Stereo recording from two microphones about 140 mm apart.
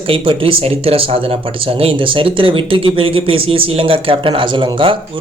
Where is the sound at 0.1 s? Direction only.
40° right (ahead or behind).